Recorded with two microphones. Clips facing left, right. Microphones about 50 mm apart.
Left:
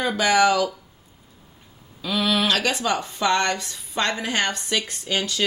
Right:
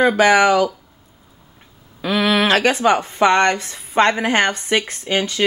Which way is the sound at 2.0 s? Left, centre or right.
Right.